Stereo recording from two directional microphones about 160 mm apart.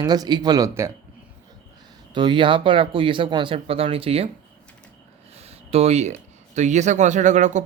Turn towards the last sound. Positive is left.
turn(degrees=-50)  # may be behind; listen again after turning